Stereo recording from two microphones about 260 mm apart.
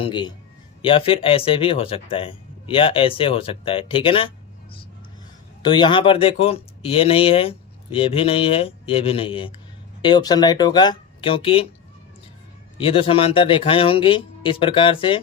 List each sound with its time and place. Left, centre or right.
0.0 s speech: centre
5.6 s speech: centre
12.7 s speech: left